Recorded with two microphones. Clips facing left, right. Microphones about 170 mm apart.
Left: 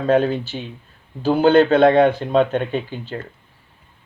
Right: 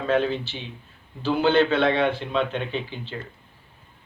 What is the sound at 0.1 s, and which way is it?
Speech, 45° left (ahead or behind).